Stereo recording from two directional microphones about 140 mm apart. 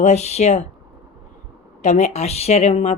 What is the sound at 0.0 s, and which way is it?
Speech, 50° left (ahead or behind).